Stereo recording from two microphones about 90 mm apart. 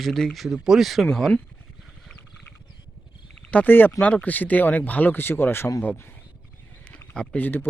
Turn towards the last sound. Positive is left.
turn(degrees=20)  # may be behind; listen again after turning